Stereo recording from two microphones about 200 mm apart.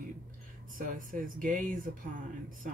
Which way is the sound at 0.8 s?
40° right (ahead or behind).